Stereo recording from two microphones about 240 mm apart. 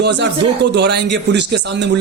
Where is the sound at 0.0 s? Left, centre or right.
Right.